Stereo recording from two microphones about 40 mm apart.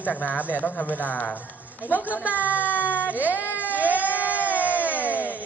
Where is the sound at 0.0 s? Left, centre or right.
Left.